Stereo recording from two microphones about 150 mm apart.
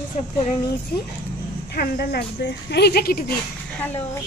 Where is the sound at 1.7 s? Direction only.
90° left.